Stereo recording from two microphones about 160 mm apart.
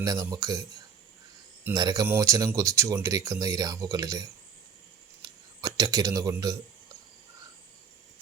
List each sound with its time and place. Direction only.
0.0 s speech: 20° right (ahead or behind)
1.6 s speech: 20° right (ahead or behind)